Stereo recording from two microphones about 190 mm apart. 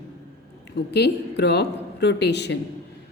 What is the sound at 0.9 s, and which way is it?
Speech, 60° left (ahead or behind).